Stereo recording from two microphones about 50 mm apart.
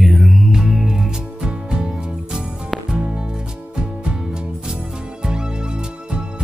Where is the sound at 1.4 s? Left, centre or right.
Centre.